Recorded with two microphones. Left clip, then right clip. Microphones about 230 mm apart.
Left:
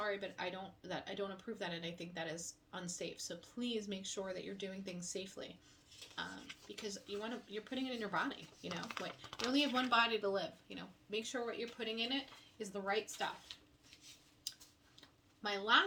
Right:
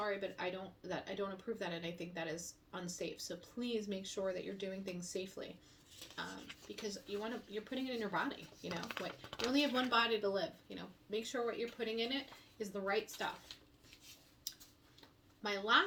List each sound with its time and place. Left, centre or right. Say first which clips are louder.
0.0 s speech: right 1 dB; centre
6.7 s speech: right 2 dB; centre
8.7 s speech: right 1 dB; centre
9.7 s speech: even; centre
15.4 s speech: even; centre